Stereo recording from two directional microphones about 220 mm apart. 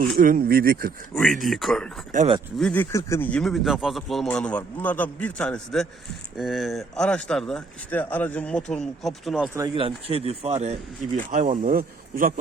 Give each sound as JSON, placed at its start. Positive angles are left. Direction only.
{"t": 0.2, "sound": "speech", "side_deg": -40}
{"t": 1.4, "sound": "speech", "side_deg": 0}
{"t": 2.1, "sound": "speech", "side_deg": -25}
{"t": 2.6, "sound": "speech", "side_deg": 5}
{"t": 9.6, "sound": "speech", "side_deg": -20}